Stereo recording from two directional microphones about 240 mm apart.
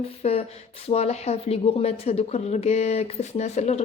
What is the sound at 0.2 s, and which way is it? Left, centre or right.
Speech, left.